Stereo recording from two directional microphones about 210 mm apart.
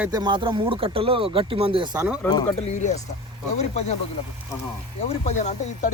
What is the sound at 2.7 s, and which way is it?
Speech, 35° left (ahead or behind).